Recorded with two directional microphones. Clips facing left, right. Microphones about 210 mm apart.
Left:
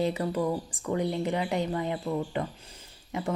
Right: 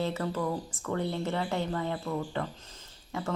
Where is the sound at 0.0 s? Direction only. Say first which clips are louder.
Left 3 dB; 15° left (ahead or behind).